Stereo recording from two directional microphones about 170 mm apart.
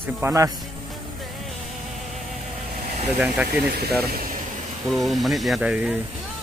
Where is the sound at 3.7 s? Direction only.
65° right (ahead or behind).